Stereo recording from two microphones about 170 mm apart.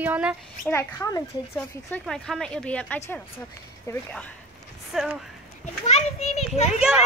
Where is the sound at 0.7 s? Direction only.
15° left (ahead or behind).